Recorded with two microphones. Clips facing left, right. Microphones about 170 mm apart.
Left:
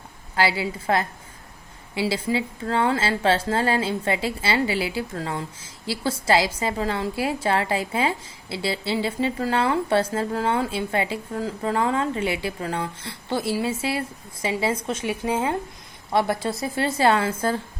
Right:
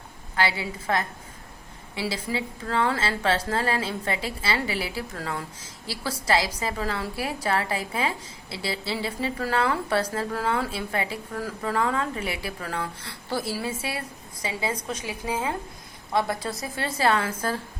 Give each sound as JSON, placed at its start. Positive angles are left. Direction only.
{"t": 0.3, "sound": "a woman's voice", "side_deg": 30}